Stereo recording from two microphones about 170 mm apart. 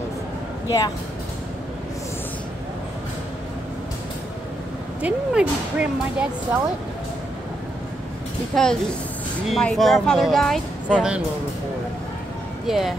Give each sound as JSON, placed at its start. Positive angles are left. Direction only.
{"t": 0.7, "sound": "speech", "side_deg": 20}
{"t": 5.0, "sound": "speech", "side_deg": -5}
{"t": 8.5, "sound": "speech", "side_deg": 0}
{"t": 12.6, "sound": "speech", "side_deg": 0}